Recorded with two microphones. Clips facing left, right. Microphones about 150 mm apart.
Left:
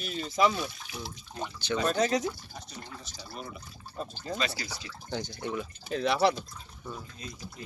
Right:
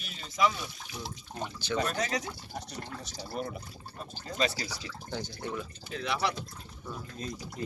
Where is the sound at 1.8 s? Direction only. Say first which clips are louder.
Left 7 dB; 30° left (ahead or behind).